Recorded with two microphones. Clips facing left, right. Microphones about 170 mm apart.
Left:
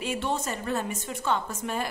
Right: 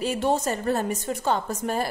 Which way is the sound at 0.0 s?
40° right (ahead or behind).